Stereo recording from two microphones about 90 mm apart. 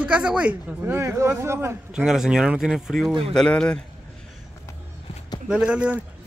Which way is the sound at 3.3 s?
10° left (ahead or behind).